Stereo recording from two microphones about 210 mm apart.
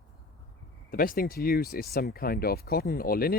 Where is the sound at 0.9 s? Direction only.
45° left (ahead or behind).